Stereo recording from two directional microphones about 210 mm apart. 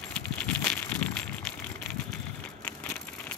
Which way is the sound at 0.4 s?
5° left (ahead or behind).